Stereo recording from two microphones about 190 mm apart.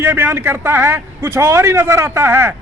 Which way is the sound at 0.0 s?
10° right (ahead or behind).